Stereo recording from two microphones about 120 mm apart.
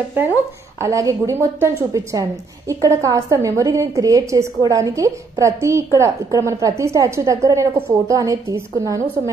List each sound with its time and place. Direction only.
0.7 s a woman's voice: 25° right (ahead or behind)